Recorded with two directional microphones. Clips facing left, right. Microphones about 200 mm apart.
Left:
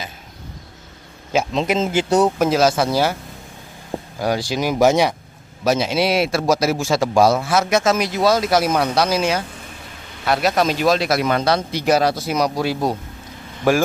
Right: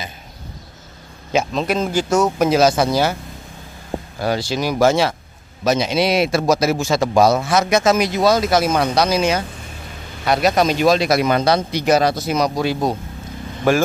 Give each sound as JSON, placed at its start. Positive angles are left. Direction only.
{"t": 1.5, "sound": "speech", "side_deg": 20}
{"t": 2.0, "sound": "speech", "side_deg": 35}
{"t": 2.3, "sound": "a man's voice", "side_deg": 0}
{"t": 4.2, "sound": "a man's voice", "side_deg": 15}